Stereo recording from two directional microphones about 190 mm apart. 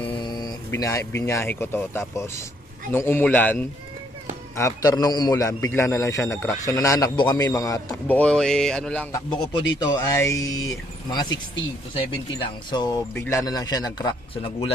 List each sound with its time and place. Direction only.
0.0 s a man's voice: 20° left (ahead or behind); by 9.0 s 5° left (ahead or behind)
9.1 s a man's voice: 20° left (ahead or behind)
12.7 s a man's voice: 20° left (ahead or behind)